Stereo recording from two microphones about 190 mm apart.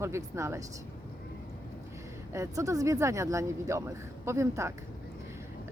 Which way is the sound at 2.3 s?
15° right (ahead or behind).